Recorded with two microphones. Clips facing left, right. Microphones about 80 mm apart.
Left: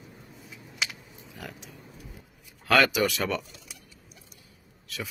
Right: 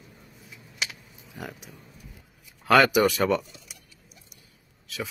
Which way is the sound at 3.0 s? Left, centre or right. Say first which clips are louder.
Right 5 dB; right.